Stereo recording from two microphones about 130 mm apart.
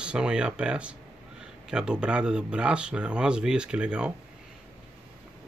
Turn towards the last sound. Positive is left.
turn(degrees=-5)  # may be behind; listen again after turning